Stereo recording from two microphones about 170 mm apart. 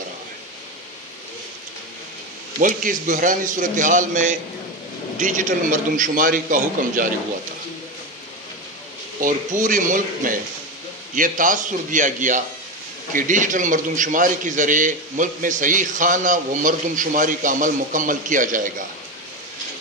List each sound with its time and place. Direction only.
2.6 s a man's voice: 50° right (ahead or behind)
9.2 s a man's voice: 50° right (ahead or behind)